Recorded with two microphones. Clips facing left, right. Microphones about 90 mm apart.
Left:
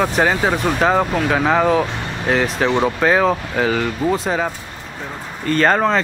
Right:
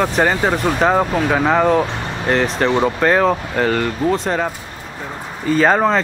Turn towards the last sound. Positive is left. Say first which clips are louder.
# right 1 dB
turn(degrees=-5)  # may be behind; listen again after turning